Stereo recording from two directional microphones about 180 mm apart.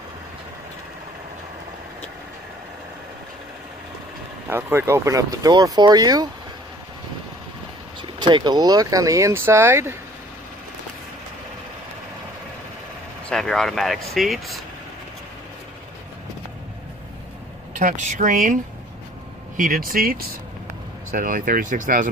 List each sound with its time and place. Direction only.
4.5 s speech: 15° right (ahead or behind)
8.2 s speech: 25° right (ahead or behind)
13.3 s speech: centre (ahead or behind)
17.7 s speech: 45° right (ahead or behind)